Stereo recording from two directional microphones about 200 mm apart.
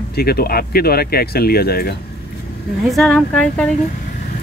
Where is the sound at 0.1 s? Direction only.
50° left (ahead or behind).